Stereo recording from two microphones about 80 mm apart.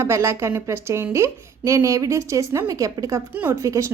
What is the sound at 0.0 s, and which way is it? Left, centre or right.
A woman's voice, right.